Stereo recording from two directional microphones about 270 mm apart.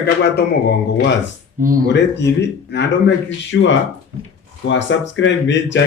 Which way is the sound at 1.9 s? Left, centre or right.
Left.